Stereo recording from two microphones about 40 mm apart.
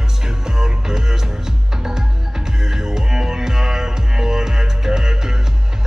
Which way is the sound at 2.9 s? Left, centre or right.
Centre.